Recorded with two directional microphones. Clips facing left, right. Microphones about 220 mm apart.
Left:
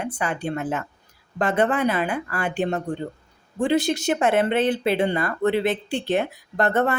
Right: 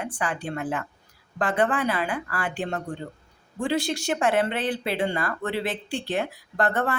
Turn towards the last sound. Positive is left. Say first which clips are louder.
# left 4 dB
turn(degrees=20)  # may be behind; listen again after turning